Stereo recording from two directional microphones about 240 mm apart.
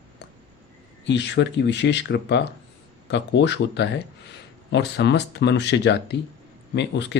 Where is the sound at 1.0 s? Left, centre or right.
Left.